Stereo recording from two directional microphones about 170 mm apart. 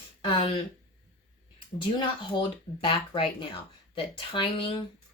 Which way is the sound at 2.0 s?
25° left (ahead or behind).